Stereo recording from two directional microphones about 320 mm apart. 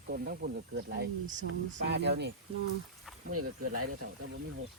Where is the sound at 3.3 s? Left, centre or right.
Right.